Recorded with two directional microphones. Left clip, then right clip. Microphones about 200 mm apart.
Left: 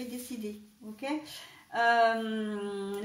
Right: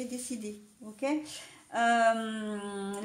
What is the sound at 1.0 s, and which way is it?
Speech, 45° right (ahead or behind).